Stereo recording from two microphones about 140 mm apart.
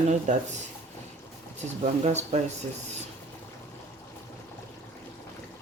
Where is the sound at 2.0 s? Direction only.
55° right (ahead or behind).